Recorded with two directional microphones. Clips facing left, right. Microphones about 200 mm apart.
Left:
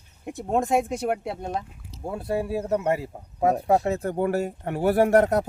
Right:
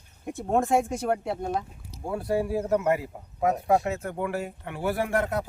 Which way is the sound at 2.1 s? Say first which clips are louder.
Right 1 dB; 25° left (ahead or behind).